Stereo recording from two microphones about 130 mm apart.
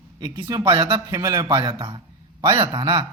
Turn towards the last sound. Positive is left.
turn(degrees=-35)  # may be behind; listen again after turning